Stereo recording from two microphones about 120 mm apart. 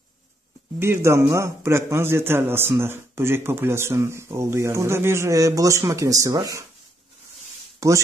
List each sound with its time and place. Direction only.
0.7 s speech: 20° right (ahead or behind)
7.8 s speech: 25° right (ahead or behind)